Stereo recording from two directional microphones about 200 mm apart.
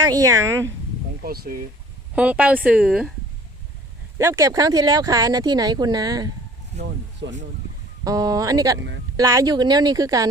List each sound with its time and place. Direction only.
0.0 s a woman's voice: 20° right (ahead or behind)
1.2 s speech: 50° right (ahead or behind)
2.1 s a woman's voice: 5° right (ahead or behind)
4.2 s speech: 15° right (ahead or behind)
6.7 s speech: 60° right (ahead or behind)
8.0 s speech: 20° right (ahead or behind)